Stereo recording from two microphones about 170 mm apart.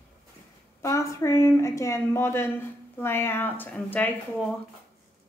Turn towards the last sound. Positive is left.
turn(degrees=10)  # may be behind; listen again after turning